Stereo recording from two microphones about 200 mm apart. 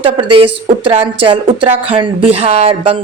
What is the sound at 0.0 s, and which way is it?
Speech, 25° right (ahead or behind).